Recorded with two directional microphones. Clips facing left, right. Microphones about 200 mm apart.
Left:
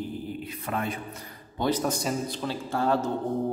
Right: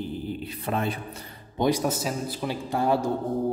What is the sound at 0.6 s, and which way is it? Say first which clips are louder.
Speech: right 3 dB; 30° right (ahead or behind).